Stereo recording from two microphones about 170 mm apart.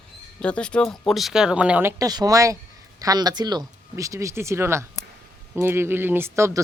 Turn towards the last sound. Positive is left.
turn(degrees=-15)  # may be behind; listen again after turning